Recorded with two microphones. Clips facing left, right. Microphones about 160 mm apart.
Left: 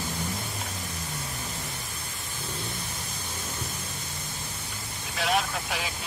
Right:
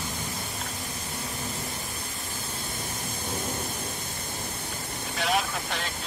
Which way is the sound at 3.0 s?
55° right (ahead or behind).